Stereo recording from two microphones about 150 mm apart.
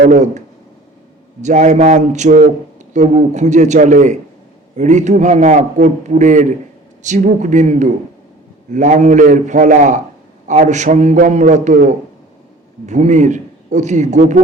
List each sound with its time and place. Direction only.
0.0 s a man's voice: 55° right (ahead or behind)